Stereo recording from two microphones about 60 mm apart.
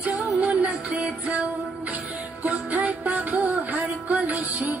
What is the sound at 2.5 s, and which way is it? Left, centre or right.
Music, right.